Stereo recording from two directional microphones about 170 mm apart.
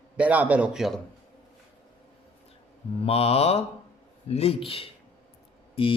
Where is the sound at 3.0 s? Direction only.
35° left (ahead or behind).